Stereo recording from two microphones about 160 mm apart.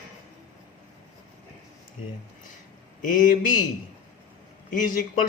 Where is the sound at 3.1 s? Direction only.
60° left (ahead or behind).